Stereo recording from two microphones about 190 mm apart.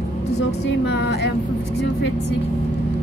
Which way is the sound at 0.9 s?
60° left (ahead or behind).